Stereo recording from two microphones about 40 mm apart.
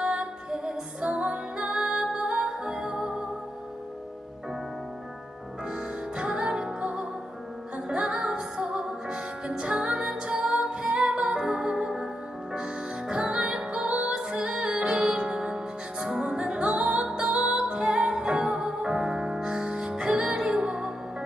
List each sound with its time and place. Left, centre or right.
0.0 s music: right
5.7 s music: right
6.8 s music: right